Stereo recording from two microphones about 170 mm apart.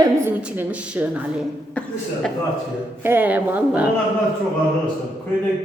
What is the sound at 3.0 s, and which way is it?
Speech, 10° right (ahead or behind).